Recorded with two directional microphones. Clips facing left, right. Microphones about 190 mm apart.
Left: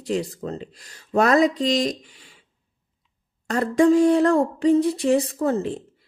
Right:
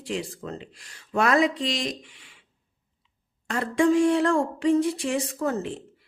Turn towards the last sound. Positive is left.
turn(degrees=35)  # may be behind; listen again after turning